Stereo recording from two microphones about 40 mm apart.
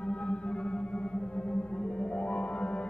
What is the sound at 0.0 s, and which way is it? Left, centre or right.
Music, left.